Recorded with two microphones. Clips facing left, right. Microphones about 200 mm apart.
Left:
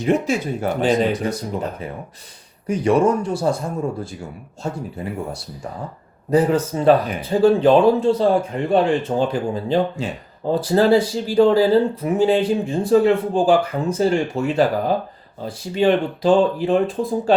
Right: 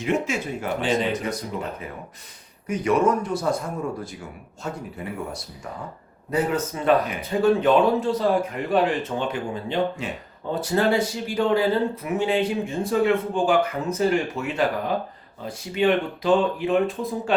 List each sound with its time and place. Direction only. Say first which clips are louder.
0.0 s speech: left 5 dB; 35° left (ahead or behind)
2.6 s speech: left 4 dB; 30° left (ahead or behind)
4.6 s speech: left 5 dB; 30° left (ahead or behind)
6.3 s speech: left 7 dB; 35° left (ahead or behind)